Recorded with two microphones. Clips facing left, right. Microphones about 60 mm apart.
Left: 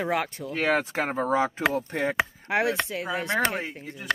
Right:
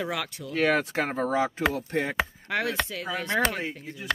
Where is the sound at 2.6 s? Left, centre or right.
Left.